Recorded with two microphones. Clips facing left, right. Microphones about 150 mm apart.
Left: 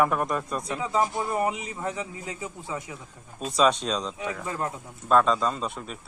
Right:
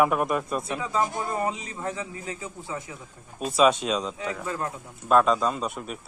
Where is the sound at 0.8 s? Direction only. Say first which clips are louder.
Left 3 dB; 20° left (ahead or behind).